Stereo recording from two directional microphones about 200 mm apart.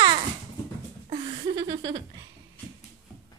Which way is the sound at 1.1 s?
20° right (ahead or behind).